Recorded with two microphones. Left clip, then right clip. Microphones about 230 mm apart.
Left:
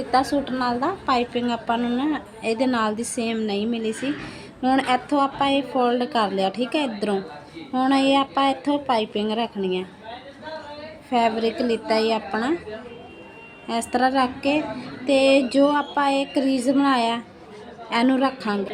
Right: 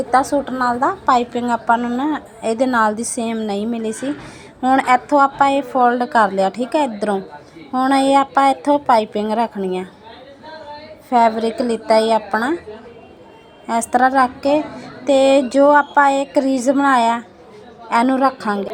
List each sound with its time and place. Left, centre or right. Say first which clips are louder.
0.1 s a woman's voice: right 4 dB; centre
11.4 s a woman's voice: right 5 dB; centre
13.7 s a woman's voice: right 7 dB; centre
16.4 s speech: right 5 dB; centre
16.8 s a woman's voice: right 7 dB; centre